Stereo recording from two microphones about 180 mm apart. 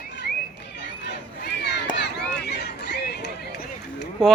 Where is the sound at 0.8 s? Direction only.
70° left (ahead or behind).